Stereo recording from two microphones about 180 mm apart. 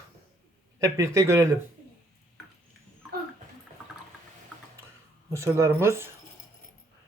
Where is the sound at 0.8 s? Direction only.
15° right (ahead or behind).